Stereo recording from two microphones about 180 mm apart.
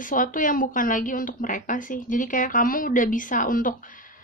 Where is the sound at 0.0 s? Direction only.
50° left (ahead or behind).